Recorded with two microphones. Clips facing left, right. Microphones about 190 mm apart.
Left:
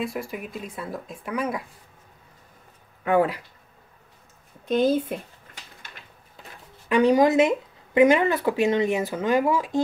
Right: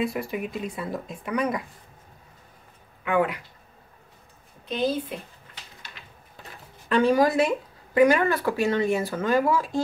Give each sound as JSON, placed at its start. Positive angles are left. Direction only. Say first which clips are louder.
{"t": 0.0, "sound": "speech", "louder": "right 3 dB", "side_deg": 0}
{"t": 3.0, "sound": "speech", "louder": "left 3 dB", "side_deg": 35}
{"t": 4.6, "sound": "a woman's voice", "louder": "left 5 dB", "side_deg": 50}
{"t": 6.9, "sound": "speech", "louder": "left 2 dB", "side_deg": 20}